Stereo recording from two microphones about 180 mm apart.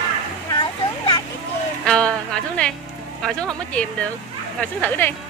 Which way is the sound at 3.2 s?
5° left (ahead or behind).